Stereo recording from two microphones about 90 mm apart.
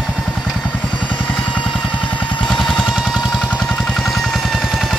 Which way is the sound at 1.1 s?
15° left (ahead or behind).